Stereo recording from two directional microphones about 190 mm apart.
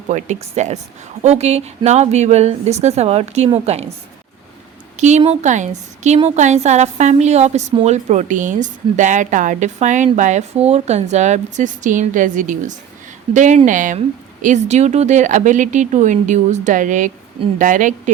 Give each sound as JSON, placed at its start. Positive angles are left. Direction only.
{"t": 0.1, "sound": "a woman's voice", "side_deg": -40}
{"t": 4.9, "sound": "a woman's voice", "side_deg": -40}